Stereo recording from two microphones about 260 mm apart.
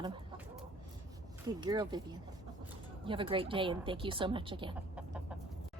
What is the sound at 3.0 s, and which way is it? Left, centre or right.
A woman's voice, centre.